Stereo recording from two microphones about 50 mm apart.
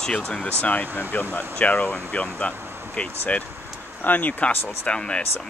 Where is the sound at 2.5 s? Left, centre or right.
Right.